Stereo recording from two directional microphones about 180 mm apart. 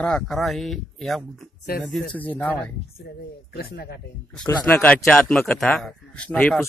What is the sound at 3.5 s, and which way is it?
Speech, 60° left (ahead or behind).